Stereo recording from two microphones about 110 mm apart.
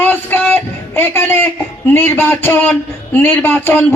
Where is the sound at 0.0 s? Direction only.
15° left (ahead or behind).